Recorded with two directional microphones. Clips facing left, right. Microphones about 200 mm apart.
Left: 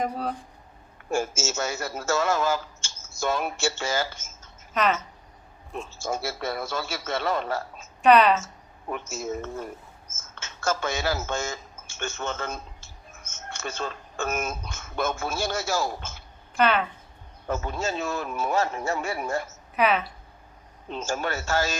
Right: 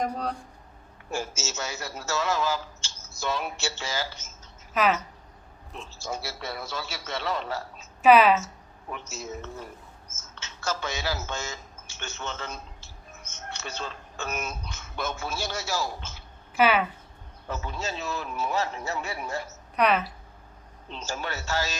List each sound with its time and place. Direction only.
0.0 s speech: 5° left (ahead or behind)
1.1 s a man's voice: 50° left (ahead or behind)
4.7 s speech: 5° right (ahead or behind)
5.7 s a man's voice: 50° left (ahead or behind)
8.0 s speech: 5° right (ahead or behind)
8.9 s a man's voice: 50° left (ahead or behind)
16.6 s speech: 5° right (ahead or behind)
17.5 s a man's voice: 50° left (ahead or behind)
19.7 s speech: centre (ahead or behind)
20.9 s a man's voice: 50° left (ahead or behind)